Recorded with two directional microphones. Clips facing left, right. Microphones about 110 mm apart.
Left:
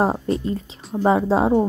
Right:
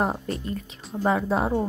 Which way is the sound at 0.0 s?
30° left (ahead or behind).